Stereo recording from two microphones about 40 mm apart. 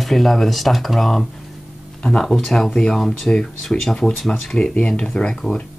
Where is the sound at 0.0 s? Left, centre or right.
Centre.